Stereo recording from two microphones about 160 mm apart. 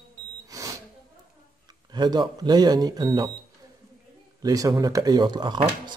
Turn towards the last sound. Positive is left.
turn(degrees=-30)  # may be behind; listen again after turning